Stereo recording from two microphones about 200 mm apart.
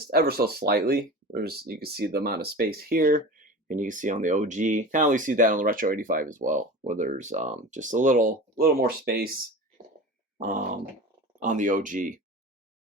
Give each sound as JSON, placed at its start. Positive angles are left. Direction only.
{"t": 0.0, "sound": "speech", "side_deg": -50}
{"t": 10.3, "sound": "speech", "side_deg": -40}